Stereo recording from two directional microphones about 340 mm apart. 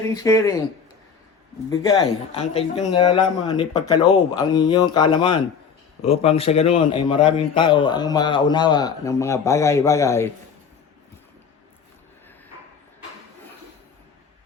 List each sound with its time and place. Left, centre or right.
0.0 s a man's voice: centre
1.7 s a man's voice: centre